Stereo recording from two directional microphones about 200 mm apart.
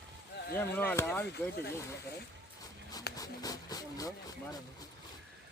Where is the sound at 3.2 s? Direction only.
20° left (ahead or behind).